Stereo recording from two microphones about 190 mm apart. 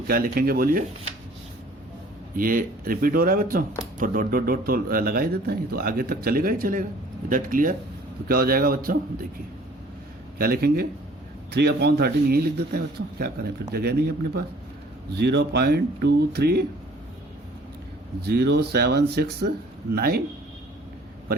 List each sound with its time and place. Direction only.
0.1 s speech: 50° right (ahead or behind)
2.3 s speech: 50° right (ahead or behind)
10.3 s a man's voice: 55° right (ahead or behind)
15.1 s a man's voice: 60° right (ahead or behind)
18.3 s a man's voice: 60° right (ahead or behind)